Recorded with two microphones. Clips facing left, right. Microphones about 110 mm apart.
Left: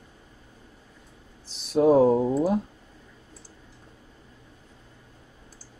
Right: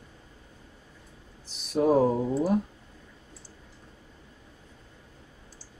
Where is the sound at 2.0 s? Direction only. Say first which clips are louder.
Left 5 dB; 30° left (ahead or behind).